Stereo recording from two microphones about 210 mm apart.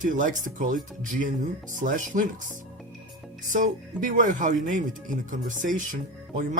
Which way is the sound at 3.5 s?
35° right (ahead or behind).